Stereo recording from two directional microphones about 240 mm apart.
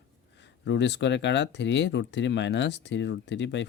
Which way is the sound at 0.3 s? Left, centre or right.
Left.